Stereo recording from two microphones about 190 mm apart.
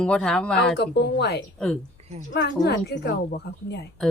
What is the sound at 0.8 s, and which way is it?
Speech, 65° left (ahead or behind).